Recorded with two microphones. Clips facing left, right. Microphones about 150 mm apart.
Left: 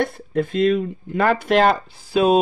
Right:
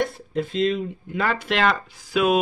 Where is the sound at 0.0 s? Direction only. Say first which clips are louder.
Left 3 dB; 55° left (ahead or behind).